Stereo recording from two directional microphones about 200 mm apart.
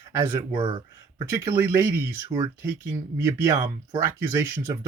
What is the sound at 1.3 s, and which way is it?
Speech, 15° right (ahead or behind).